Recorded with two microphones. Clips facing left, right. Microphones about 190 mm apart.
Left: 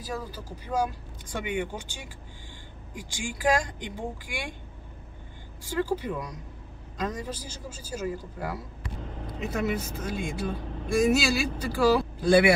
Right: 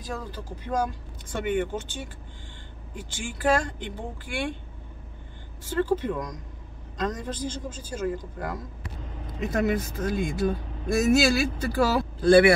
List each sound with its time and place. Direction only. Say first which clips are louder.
0.0 s speech: even; 10° left (ahead or behind)
5.7 s speech: right 3 dB; 10° left (ahead or behind)
9.4 s speech: right 4 dB; 50° right (ahead or behind)
12.2 s speech: right 5 dB; 10° left (ahead or behind)